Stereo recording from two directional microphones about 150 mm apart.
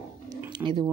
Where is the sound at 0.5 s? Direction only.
30° right (ahead or behind).